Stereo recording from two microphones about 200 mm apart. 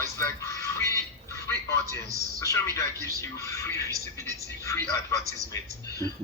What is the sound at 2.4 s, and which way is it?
Speech, 15° left (ahead or behind).